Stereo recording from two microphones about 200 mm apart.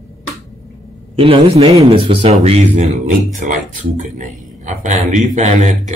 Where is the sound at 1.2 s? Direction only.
30° right (ahead or behind).